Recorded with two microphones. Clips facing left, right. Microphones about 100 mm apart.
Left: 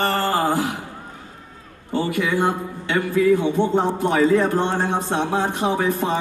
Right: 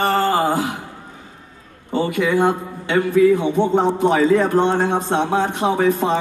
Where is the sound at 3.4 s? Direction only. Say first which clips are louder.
Right 2 dB; 20° right (ahead or behind).